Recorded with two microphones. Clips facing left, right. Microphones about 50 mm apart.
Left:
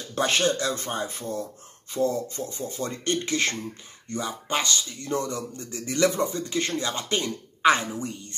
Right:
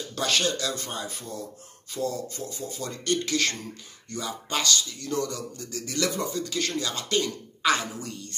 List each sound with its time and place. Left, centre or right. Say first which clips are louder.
0.1 s speech: left 3 dB; left